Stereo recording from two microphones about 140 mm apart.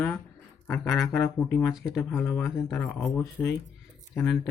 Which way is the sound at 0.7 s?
5° left (ahead or behind).